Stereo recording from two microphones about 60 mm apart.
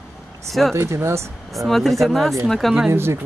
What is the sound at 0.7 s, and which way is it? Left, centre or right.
Speech, right.